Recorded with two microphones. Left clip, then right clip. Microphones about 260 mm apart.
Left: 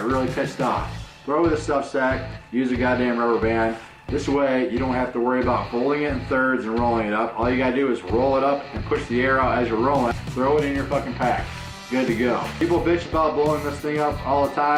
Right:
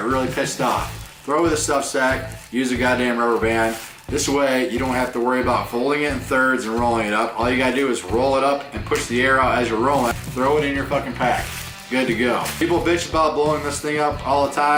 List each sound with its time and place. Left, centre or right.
0.0 s speech: centre
8.1 s speech: centre